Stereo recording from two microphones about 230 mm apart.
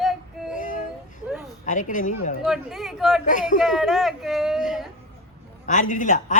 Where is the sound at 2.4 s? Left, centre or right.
Centre.